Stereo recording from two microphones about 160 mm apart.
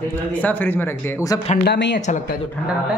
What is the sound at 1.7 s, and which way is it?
Speech, 90° left.